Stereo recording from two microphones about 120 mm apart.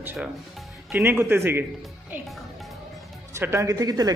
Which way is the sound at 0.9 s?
15° right (ahead or behind).